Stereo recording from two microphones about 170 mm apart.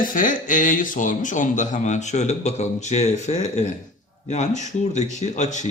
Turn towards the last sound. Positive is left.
turn(degrees=45)  # may be behind; listen again after turning